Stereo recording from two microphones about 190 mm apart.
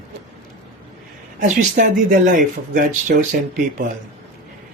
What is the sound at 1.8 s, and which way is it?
Speech, 50° right (ahead or behind).